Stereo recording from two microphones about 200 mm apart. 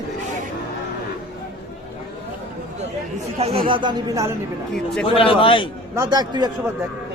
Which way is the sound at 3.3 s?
30° right (ahead or behind).